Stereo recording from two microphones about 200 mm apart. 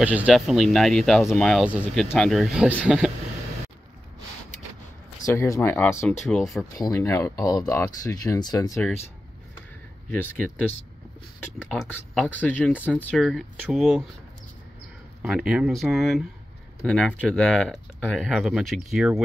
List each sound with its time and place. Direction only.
0.0 s speech: 5° right (ahead or behind)
5.2 s speech: 15° left (ahead or behind)
6.8 s speech: 15° left (ahead or behind)
10.0 s speech: 10° left (ahead or behind)
11.7 s speech: 5° left (ahead or behind)
15.2 s speech: 5° right (ahead or behind)